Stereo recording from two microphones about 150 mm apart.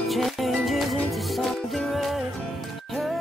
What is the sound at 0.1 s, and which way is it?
Music, centre (ahead or behind).